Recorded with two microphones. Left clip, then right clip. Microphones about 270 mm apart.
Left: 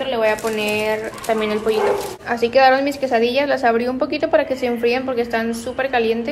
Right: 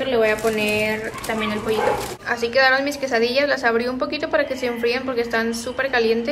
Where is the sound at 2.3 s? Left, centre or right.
Centre.